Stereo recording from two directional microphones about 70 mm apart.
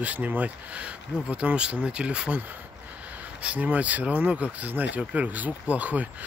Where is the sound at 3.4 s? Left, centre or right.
Right.